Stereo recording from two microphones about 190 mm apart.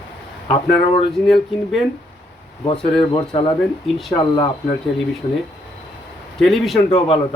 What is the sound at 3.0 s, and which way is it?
Speech, 30° left (ahead or behind).